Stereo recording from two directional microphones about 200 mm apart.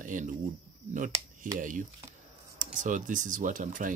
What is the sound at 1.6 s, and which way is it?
Speech, 40° right (ahead or behind).